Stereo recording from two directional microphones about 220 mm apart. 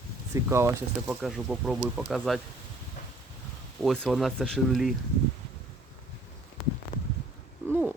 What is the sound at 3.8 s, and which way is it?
Speech, centre (ahead or behind).